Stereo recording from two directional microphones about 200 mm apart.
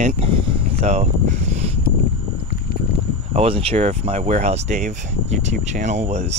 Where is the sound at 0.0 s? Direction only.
25° right (ahead or behind).